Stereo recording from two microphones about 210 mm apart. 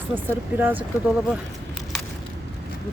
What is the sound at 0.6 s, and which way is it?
Speech, 10° right (ahead or behind).